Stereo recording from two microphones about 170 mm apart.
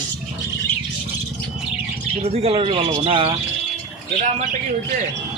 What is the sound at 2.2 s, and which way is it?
Speech, 35° right (ahead or behind).